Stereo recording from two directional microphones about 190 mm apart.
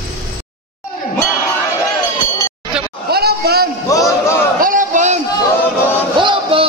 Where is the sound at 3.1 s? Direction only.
55° right (ahead or behind).